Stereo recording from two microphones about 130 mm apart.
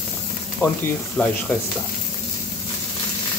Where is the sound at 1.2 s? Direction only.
10° left (ahead or behind).